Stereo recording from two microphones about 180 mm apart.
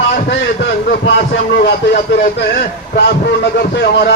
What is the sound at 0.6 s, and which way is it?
A man's voice, 70° left (ahead or behind).